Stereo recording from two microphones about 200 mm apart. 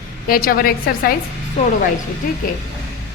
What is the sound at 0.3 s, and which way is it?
Speech, 45° left (ahead or behind).